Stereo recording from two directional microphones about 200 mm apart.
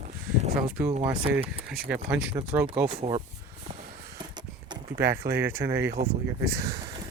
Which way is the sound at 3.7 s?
25° right (ahead or behind).